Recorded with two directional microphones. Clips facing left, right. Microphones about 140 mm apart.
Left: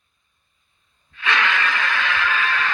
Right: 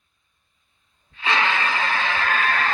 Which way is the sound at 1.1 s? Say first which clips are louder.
Even; 30° right (ahead or behind).